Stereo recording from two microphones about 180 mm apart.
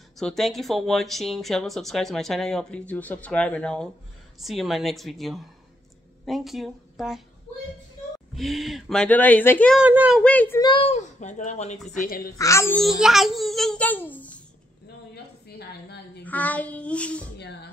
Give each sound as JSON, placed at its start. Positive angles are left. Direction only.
{"t": 0.2, "sound": "speech", "side_deg": 0}
{"t": 8.4, "sound": "speech", "side_deg": 0}
{"t": 9.8, "sound": "speech", "side_deg": -5}
{"t": 10.2, "sound": "speech", "side_deg": 10}
{"t": 10.6, "sound": "a child's voice", "side_deg": 25}
{"t": 10.9, "sound": "speech", "side_deg": 40}
{"t": 12.0, "sound": "a woman's voice", "side_deg": 55}
{"t": 12.4, "sound": "speech", "side_deg": 15}
{"t": 12.8, "sound": "speech", "side_deg": 0}
{"t": 15.4, "sound": "a sound", "side_deg": 65}
{"t": 16.3, "sound": "speech", "side_deg": 10}
{"t": 17.4, "sound": "music", "side_deg": 70}